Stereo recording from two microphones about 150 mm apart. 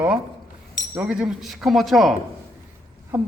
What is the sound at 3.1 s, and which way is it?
Speech, 10° right (ahead or behind).